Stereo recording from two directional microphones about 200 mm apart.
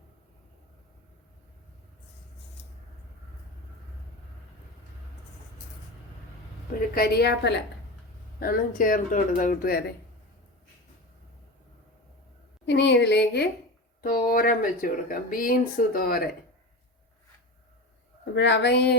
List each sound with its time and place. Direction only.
6.9 s speech: 50° left (ahead or behind)
8.4 s speech: 45° left (ahead or behind)
12.6 s a woman's voice: 60° left (ahead or behind)
18.3 s a woman's voice: 60° left (ahead or behind)